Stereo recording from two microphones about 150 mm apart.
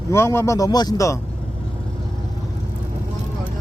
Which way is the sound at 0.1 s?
15° left (ahead or behind).